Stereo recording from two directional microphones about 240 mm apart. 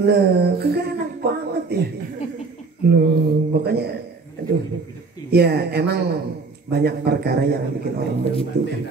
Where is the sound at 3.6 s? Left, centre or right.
Right.